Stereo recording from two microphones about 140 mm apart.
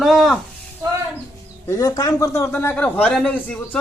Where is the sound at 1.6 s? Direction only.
25° left (ahead or behind).